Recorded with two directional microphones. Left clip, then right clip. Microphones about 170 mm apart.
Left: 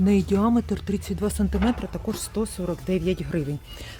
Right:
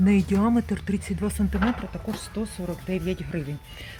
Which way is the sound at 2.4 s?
40° left (ahead or behind).